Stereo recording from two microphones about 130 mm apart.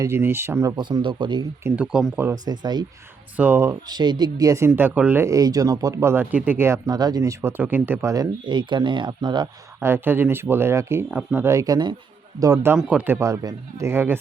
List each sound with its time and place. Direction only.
0.0 s speech: 20° right (ahead or behind)
0.8 s speech: 35° right (ahead or behind)
1.6 s speech: 10° right (ahead or behind)
2.3 s speech: 30° right (ahead or behind)
3.3 s speech: 15° right (ahead or behind)
3.8 s speech: 35° right (ahead or behind); by 8.1 s 15° right (ahead or behind)
8.1 s speech: 30° right (ahead or behind)
9.8 s speech: 15° right (ahead or behind)
12.7 s speech: 10° right (ahead or behind)